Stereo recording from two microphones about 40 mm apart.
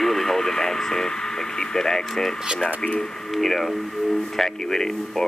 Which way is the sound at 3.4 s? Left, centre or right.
Centre.